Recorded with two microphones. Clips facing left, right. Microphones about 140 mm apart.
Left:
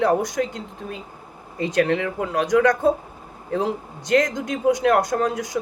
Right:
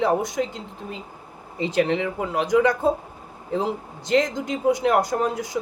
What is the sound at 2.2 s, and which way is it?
Speech, 5° right (ahead or behind).